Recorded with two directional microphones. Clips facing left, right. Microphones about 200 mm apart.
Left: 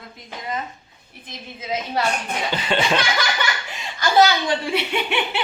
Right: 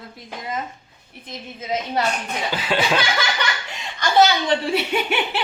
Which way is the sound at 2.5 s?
5° right (ahead or behind).